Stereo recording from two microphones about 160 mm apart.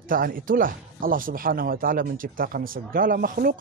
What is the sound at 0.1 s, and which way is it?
A man's voice, 60° right (ahead or behind).